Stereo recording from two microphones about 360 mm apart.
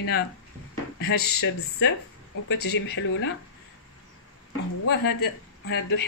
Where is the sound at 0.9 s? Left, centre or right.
Left.